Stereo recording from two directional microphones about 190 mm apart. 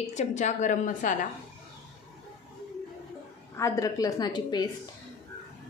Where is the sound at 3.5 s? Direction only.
15° left (ahead or behind).